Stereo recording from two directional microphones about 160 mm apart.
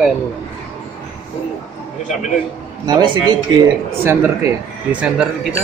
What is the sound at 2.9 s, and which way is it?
Speech, 30° right (ahead or behind).